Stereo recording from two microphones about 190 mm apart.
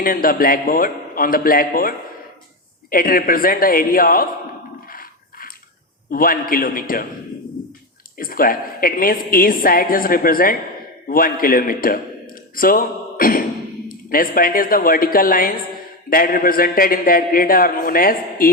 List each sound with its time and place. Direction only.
0.0 s a woman's voice: 50° left (ahead or behind)
4.9 s a sound: 50° left (ahead or behind)
6.1 s a woman's voice: 50° left (ahead or behind)
8.2 s a woman's voice: 50° left (ahead or behind)